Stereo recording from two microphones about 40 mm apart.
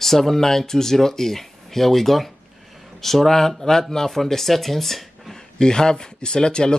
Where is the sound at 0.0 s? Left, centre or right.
Centre.